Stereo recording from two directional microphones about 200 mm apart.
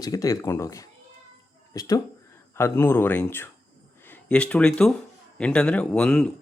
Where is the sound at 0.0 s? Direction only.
15° left (ahead or behind).